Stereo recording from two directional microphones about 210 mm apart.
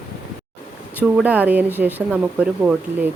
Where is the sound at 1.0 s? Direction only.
5° right (ahead or behind).